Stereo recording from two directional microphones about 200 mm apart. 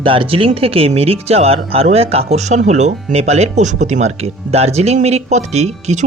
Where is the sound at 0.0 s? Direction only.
25° right (ahead or behind).